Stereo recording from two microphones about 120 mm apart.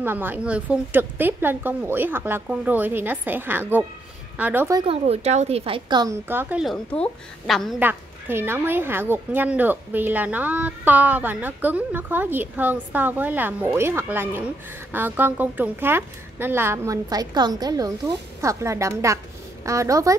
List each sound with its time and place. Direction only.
0.0 s speech: 15° right (ahead or behind)
4.8 s speech: 60° right (ahead or behind)
5.9 s a woman's voice: 35° right (ahead or behind)
6.2 s speech: 15° right (ahead or behind)
7.0 s a woman's voice: centre (ahead or behind)
7.8 s a woman's voice: 20° right (ahead or behind)